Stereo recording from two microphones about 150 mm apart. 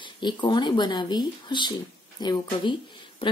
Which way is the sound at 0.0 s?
30° left (ahead or behind).